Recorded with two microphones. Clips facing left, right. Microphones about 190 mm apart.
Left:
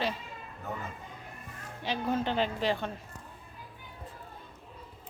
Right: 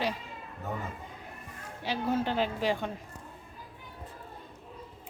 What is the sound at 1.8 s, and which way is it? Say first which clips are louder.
Speech: right 1 dB; 10° right (ahead or behind).